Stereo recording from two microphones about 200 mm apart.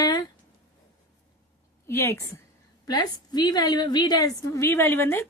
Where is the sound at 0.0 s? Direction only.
20° left (ahead or behind).